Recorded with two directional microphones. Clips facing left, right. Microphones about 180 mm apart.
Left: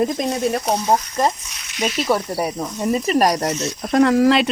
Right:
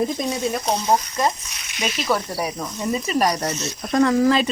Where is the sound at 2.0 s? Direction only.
25° left (ahead or behind).